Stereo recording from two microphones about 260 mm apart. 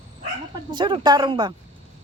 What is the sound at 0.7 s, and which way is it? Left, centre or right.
Speech, centre.